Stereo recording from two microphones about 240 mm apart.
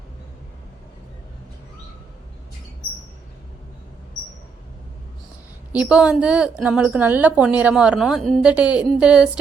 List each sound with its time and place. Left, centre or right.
5.7 s a woman's voice: centre